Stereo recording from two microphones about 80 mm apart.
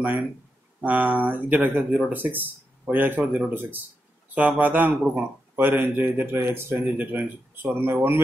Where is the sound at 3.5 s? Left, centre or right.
Right.